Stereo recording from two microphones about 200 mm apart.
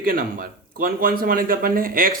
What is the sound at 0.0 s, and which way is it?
Speech, 45° right (ahead or behind).